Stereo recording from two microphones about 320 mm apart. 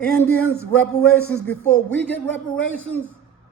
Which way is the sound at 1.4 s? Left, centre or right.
Centre.